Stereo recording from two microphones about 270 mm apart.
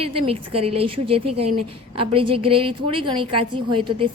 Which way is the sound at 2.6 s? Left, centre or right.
Centre.